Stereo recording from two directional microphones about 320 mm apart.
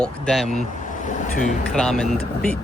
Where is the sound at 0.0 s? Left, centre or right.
Centre.